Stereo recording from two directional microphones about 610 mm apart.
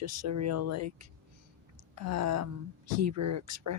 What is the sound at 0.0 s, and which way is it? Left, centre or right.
Speech, right.